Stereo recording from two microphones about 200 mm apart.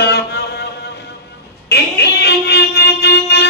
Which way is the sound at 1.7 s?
55° left (ahead or behind).